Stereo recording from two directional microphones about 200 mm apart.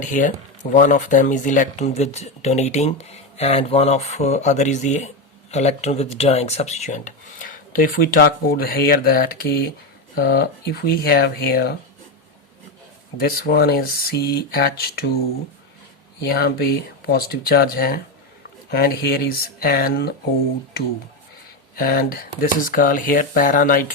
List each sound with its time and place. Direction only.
0.0 s speech: 40° left (ahead or behind)
13.1 s speech: 50° left (ahead or behind)
16.3 s speech: 50° left (ahead or behind)
21.8 s speech: 45° left (ahead or behind)